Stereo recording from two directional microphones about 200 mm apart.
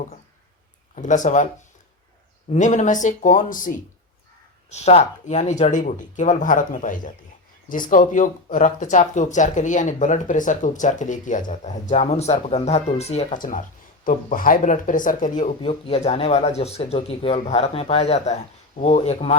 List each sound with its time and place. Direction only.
0.9 s speech: 40° left (ahead or behind)
2.5 s speech: 40° left (ahead or behind)